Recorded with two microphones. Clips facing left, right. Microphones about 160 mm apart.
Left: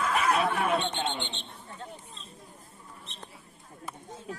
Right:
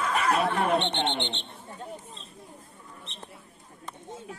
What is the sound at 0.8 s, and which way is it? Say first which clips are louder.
Speech: right 3 dB; 65° right (ahead or behind).